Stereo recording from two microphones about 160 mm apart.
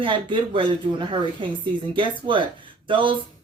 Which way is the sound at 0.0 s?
30° right (ahead or behind).